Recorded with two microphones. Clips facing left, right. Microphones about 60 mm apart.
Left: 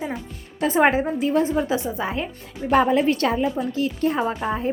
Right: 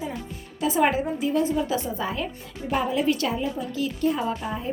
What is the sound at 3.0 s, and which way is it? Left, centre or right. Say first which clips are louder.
A woman's voice: left 4 dB; left.